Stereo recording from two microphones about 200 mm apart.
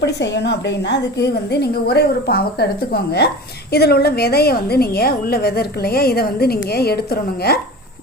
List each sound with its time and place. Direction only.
0.0 s a woman's voice: 60° left (ahead or behind)